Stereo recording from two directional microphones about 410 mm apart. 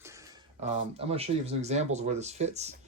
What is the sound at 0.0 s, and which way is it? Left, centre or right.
Speech, centre.